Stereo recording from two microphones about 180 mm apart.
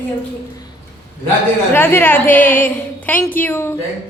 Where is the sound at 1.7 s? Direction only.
10° left (ahead or behind).